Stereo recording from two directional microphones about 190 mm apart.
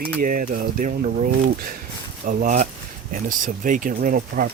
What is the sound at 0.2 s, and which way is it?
Speech, 50° right (ahead or behind).